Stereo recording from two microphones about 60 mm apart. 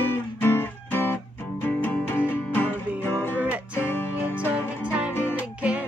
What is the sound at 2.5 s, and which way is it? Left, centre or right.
Music, left.